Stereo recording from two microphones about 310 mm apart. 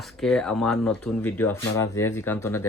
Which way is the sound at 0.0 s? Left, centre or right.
Centre.